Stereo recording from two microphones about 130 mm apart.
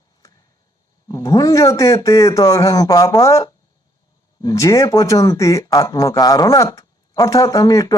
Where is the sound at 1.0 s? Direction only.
25° left (ahead or behind).